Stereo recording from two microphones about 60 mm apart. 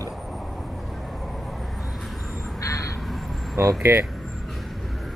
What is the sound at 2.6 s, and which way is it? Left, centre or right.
Vehicle, left.